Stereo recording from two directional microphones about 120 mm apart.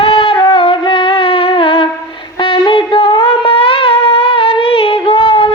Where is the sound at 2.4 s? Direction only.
45° left (ahead or behind).